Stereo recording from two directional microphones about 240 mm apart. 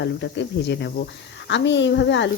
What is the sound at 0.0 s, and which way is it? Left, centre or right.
Speech, left.